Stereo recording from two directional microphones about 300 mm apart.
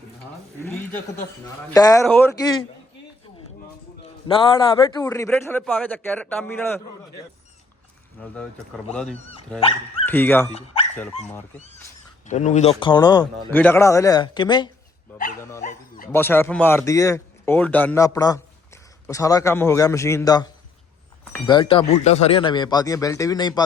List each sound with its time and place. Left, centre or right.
1.7 s a man's voice: centre
4.4 s a man's voice: centre
8.2 s speech: centre
9.6 s speech: centre
10.1 s a man's voice: centre
11.5 s a man's voice: left